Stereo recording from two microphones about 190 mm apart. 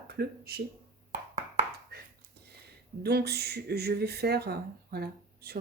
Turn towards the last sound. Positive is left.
turn(degrees=-55)  # may be behind; listen again after turning